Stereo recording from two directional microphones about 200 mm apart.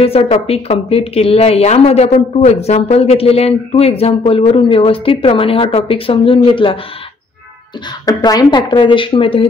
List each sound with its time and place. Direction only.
0.0 s speech: 30° left (ahead or behind)
8.0 s speech: 20° left (ahead or behind)